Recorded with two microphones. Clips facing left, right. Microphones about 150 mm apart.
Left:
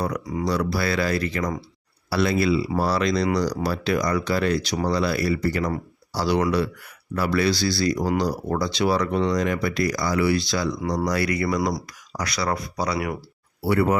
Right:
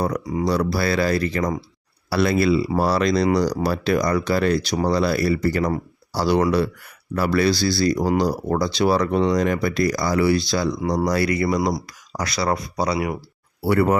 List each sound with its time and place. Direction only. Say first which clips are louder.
0.3 s speech: right 3 dB; 30° right (ahead or behind)
2.0 s speech: right 3 dB; 50° right (ahead or behind); by 3.6 s 30° right (ahead or behind)
3.7 s speech: right 3 dB; 50° right (ahead or behind)
5.6 s a sound: right 3 dB; 35° right (ahead or behind)
6.4 s speech: right 3 dB; 35° right (ahead or behind)
13.7 s speech: right 2 dB; 50° right (ahead or behind)